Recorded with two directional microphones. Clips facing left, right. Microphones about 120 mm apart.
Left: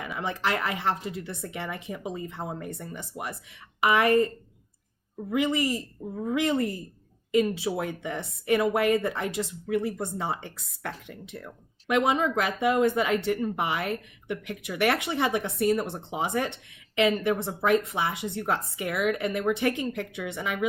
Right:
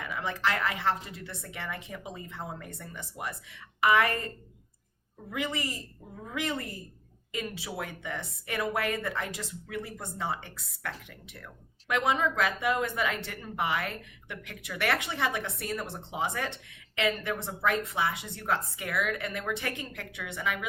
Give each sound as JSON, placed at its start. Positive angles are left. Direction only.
{"t": 0.0, "sound": "speech", "side_deg": 20}
{"t": 5.3, "sound": "speech", "side_deg": 20}